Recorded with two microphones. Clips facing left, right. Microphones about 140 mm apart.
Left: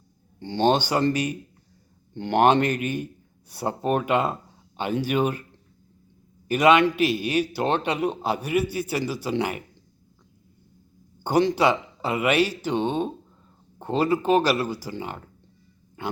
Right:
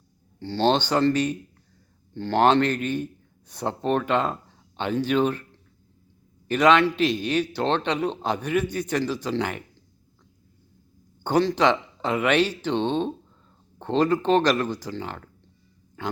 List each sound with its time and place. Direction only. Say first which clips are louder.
0.3 s speech: left 1 dB; 15° left (ahead or behind)
6.5 s speech: left 1 dB; 10° left (ahead or behind)
11.2 s speech: even; 10° left (ahead or behind)